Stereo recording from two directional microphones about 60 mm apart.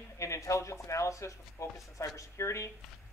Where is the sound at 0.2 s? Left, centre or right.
Left.